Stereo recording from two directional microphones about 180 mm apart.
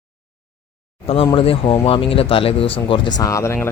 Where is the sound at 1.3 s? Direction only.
30° left (ahead or behind).